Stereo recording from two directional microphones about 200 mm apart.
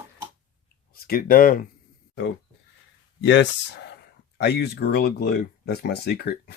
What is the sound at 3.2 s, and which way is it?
Speech, 65° left (ahead or behind).